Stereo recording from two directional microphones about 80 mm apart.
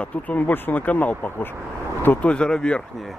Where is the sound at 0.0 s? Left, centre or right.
Centre.